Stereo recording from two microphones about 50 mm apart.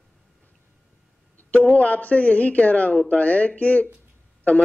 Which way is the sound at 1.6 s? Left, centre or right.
Left.